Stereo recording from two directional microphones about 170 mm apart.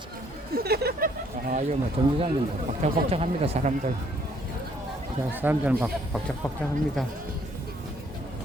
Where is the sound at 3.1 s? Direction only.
35° right (ahead or behind).